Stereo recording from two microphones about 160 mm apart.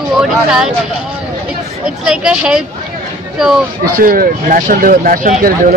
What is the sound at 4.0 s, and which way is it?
Speech, 60° right (ahead or behind).